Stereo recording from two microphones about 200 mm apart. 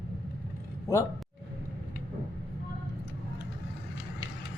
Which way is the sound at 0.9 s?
15° left (ahead or behind).